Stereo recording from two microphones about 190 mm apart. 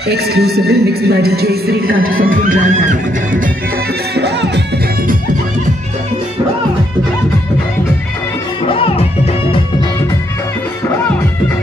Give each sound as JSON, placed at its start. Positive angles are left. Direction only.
{"t": 0.1, "sound": "speech", "side_deg": -55}
{"t": 8.6, "sound": "music", "side_deg": 30}